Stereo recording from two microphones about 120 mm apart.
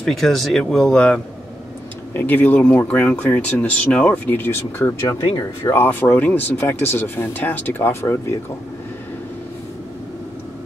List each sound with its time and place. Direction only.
0.0 s speech: centre (ahead or behind); by 4.9 s 20° left (ahead or behind)
5.0 s speech: 35° left (ahead or behind)
5.7 s speech: 20° left (ahead or behind)